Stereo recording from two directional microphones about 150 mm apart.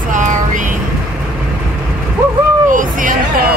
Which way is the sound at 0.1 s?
55° right (ahead or behind).